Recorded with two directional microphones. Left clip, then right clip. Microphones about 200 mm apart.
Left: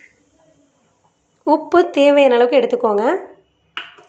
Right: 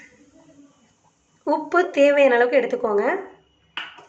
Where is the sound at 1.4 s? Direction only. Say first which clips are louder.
Left 6 dB; 15° left (ahead or behind).